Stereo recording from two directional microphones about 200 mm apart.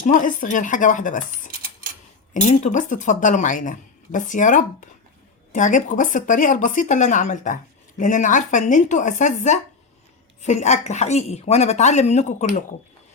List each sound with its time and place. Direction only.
0.0 s a woman's voice: 40° left (ahead or behind)
2.3 s a woman's voice: 40° left (ahead or behind)